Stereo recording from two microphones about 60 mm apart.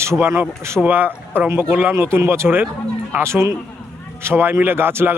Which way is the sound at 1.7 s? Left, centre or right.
Right.